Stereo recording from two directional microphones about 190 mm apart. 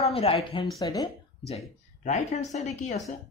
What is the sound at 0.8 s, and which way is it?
Speech, 20° left (ahead or behind).